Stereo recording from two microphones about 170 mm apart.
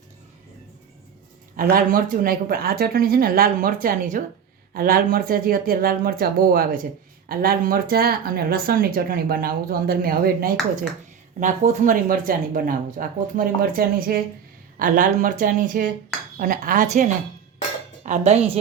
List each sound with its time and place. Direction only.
1.5 s speech: 55° right (ahead or behind)
11.3 s speech: 45° right (ahead or behind)